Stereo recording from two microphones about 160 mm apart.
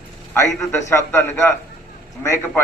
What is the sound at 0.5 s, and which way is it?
A man's voice, 15° left (ahead or behind).